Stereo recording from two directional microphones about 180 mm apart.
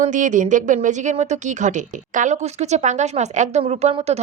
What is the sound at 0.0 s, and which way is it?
Speech, 45° right (ahead or behind).